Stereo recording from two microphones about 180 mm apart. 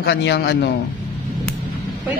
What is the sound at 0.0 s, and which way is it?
Speech, 65° left (ahead or behind).